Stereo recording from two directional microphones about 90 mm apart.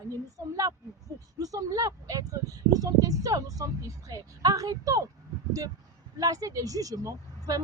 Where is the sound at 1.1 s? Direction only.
40° right (ahead or behind).